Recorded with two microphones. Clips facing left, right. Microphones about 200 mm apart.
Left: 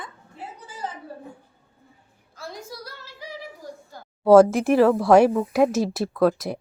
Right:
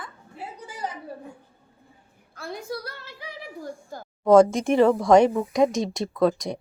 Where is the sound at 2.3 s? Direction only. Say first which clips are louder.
Right 4 dB; 60° right (ahead or behind).